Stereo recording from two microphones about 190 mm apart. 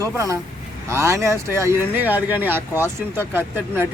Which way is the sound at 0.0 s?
15° right (ahead or behind).